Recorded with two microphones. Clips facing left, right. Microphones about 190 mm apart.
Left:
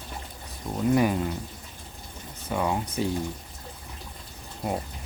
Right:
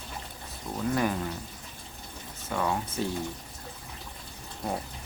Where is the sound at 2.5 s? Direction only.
15° left (ahead or behind).